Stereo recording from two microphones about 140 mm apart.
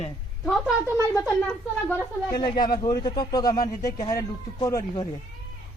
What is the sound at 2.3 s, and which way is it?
Speech, 30° left (ahead or behind).